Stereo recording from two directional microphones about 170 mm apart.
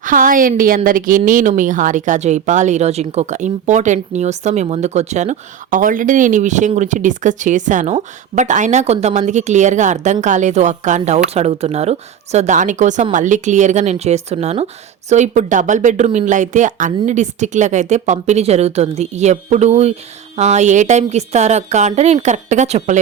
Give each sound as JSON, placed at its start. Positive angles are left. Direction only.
{"t": 0.0, "sound": "speech", "side_deg": -50}